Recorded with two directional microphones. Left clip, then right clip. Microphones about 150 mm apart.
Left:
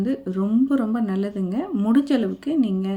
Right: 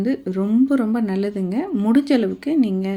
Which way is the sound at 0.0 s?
15° right (ahead or behind).